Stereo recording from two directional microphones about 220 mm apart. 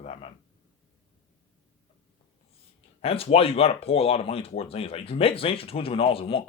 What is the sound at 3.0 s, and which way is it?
Speech, 25° left (ahead or behind).